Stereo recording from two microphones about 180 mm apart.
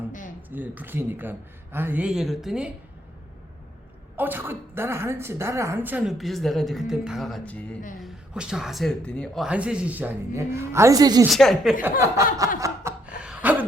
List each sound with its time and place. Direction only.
0.5 s a woman's voice: 10° right (ahead or behind)
4.2 s a woman's voice: 10° right (ahead or behind); by 7.8 s 5° left (ahead or behind)
8.0 s speech: 5° right (ahead or behind); by 11.3 s 20° right (ahead or behind)
11.3 s speech: centre (ahead or behind)
11.9 s a woman's voice: 15° right (ahead or behind)
12.5 s chuckle: 15° right (ahead or behind)
13.1 s a sound: 5° right (ahead or behind)